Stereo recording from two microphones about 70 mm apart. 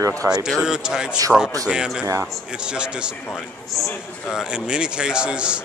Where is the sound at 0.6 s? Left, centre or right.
Centre.